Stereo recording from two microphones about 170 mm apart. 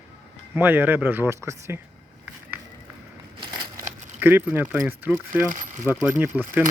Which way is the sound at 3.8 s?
10° right (ahead or behind).